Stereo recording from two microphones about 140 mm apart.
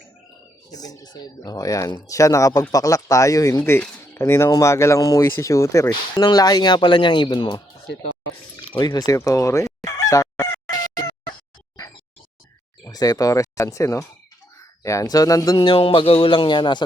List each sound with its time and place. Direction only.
0.7 s speech: 25° left (ahead or behind)
3.6 s speech: 15° left (ahead or behind); by 7.6 s 30° left (ahead or behind)
8.5 s fowl: 30° left (ahead or behind)
12.8 s speech: 25° left (ahead or behind)
15.5 s speech: 40° left (ahead or behind)